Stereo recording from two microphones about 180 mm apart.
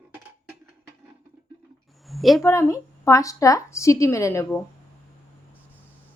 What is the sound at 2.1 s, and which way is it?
Speech, centre (ahead or behind).